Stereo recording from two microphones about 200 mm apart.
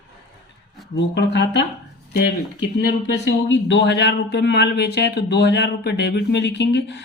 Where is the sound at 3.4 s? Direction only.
65° left (ahead or behind).